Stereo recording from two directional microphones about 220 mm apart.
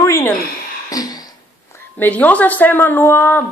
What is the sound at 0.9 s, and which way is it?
Beatboxing, 15° left (ahead or behind).